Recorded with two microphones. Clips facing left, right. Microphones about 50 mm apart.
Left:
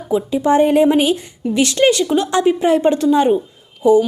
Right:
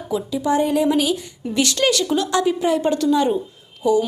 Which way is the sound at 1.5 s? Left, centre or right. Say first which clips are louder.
Left 5 dB; left.